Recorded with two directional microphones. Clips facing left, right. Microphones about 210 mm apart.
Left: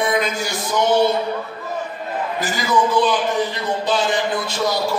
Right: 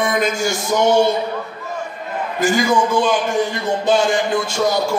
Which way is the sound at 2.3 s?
45° right (ahead or behind).